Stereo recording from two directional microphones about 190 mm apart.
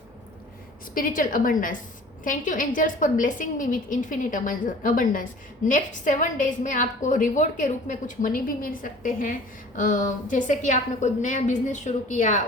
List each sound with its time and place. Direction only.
0.9 s a woman's voice: 45° left (ahead or behind)